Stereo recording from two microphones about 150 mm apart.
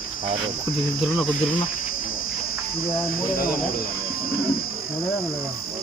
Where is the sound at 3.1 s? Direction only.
75° left (ahead or behind).